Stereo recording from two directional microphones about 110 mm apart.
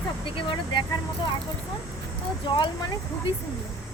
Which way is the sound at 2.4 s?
50° left (ahead or behind).